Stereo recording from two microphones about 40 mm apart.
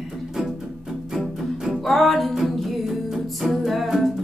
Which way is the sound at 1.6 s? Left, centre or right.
Centre.